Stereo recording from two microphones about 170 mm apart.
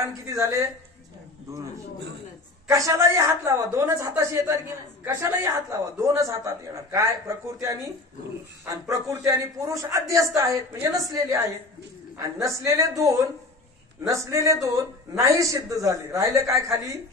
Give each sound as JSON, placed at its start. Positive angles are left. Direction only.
{"t": 0.3, "sound": "a man's voice", "side_deg": -15}
{"t": 2.7, "sound": "a man's voice", "side_deg": -20}